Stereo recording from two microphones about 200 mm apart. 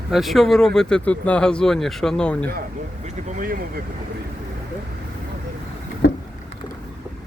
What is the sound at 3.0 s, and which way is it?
Speech, 40° right (ahead or behind).